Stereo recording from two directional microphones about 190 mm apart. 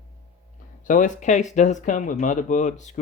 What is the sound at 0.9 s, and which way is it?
Speech, 40° left (ahead or behind).